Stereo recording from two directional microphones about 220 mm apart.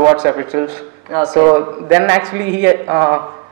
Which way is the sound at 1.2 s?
20° right (ahead or behind).